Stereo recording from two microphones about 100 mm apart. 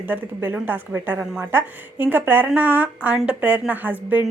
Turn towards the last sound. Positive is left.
turn(degrees=-15)  # may be behind; listen again after turning